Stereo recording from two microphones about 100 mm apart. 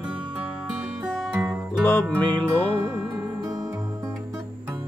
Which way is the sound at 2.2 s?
15° left (ahead or behind).